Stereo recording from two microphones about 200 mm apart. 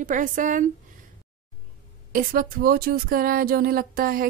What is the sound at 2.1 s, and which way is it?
A woman's voice, 45° right (ahead or behind).